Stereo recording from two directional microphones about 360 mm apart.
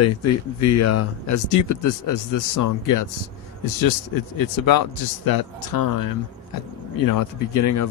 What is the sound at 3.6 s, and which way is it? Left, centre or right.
Speech, left.